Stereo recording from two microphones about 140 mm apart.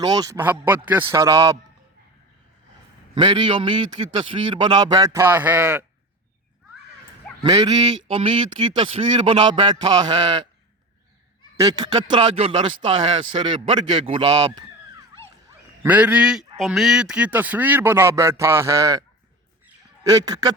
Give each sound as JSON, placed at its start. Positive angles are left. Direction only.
{"t": 0.0, "sound": "a man's voice", "side_deg": -30}
{"t": 0.3, "sound": "a man's voice", "side_deg": -15}
{"t": 3.2, "sound": "speech", "side_deg": -35}
{"t": 7.4, "sound": "a man's voice", "side_deg": -30}
{"t": 8.0, "sound": "speech", "side_deg": -40}
{"t": 11.5, "sound": "speech", "side_deg": -25}
{"t": 15.8, "sound": "a man's voice", "side_deg": -10}
{"t": 20.1, "sound": "a man's voice", "side_deg": -25}